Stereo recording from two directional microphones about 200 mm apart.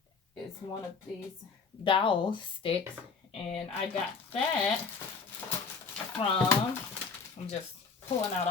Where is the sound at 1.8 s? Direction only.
25° left (ahead or behind).